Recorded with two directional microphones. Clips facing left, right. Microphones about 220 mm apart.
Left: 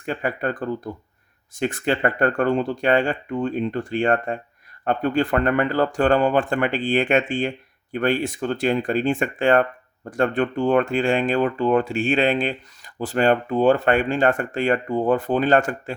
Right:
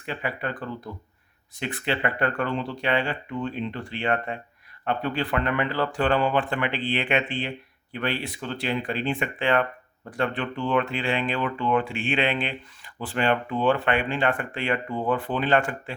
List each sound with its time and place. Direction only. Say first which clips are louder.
0.0 s speech: left 6 dB; 45° left (ahead or behind)